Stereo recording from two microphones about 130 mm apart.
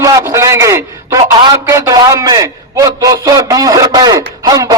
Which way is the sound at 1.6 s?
20° right (ahead or behind).